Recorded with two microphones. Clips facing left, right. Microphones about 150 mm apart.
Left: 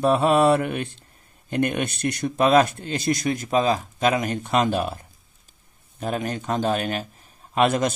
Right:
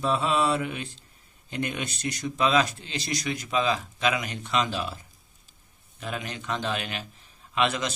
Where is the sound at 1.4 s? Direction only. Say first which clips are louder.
Left 8 dB; 55° left (ahead or behind).